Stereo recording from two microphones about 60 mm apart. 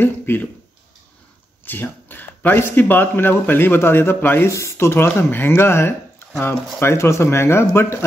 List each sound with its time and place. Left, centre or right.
0.0 s speech: left
1.6 s speech: left
4.5 s speech: left